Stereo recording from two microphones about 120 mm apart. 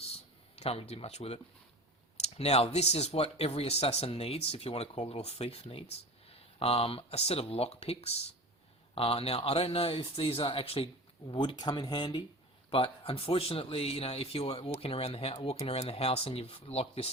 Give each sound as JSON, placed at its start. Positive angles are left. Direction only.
{"t": 0.1, "sound": "a sound", "side_deg": 60}
{"t": 2.2, "sound": "speech", "side_deg": 60}
{"t": 12.7, "sound": "speech", "side_deg": 50}